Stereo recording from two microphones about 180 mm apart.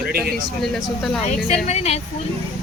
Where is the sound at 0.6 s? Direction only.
Centre (ahead or behind).